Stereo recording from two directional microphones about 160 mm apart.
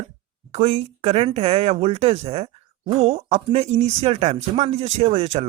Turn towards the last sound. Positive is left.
turn(degrees=-40)  # may be behind; listen again after turning